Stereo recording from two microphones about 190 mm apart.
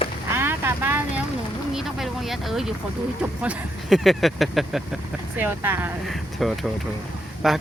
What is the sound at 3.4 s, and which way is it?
Speech, 5° right (ahead or behind).